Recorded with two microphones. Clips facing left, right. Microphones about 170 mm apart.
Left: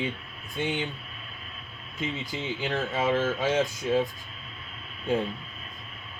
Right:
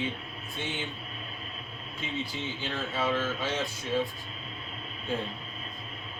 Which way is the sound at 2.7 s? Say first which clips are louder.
Left 4 dB; 45° left (ahead or behind).